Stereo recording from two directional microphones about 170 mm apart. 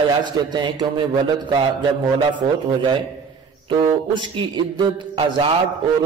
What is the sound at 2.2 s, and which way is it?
A man's voice, 30° right (ahead or behind).